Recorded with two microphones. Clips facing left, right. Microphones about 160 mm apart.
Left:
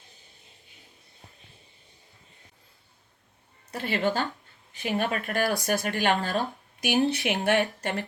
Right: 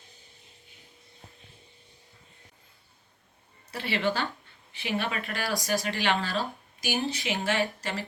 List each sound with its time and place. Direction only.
3.7 s speech: 45° left (ahead or behind)